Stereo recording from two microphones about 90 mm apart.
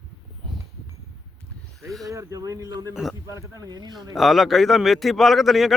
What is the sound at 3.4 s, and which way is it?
Speech, 40° right (ahead or behind).